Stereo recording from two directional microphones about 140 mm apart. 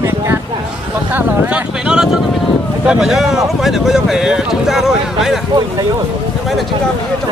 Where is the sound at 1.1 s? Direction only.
10° right (ahead or behind).